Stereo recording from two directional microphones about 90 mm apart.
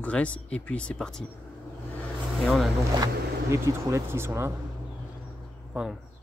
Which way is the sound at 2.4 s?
5° left (ahead or behind).